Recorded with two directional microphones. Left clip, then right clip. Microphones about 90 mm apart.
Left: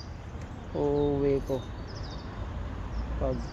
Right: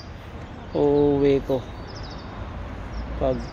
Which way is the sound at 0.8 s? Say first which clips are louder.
Right 8 dB; 90° right.